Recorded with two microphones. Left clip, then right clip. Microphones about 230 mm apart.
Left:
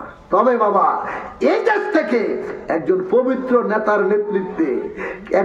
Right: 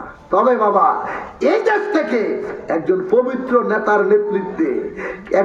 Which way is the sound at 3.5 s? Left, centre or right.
Left.